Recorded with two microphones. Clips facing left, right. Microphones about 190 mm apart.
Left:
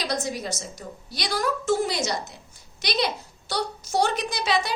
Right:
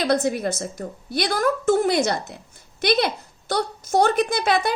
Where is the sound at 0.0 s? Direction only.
55° right (ahead or behind).